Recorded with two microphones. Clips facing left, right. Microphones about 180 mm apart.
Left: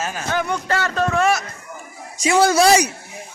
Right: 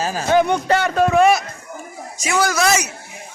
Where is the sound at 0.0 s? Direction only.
35° right (ahead or behind).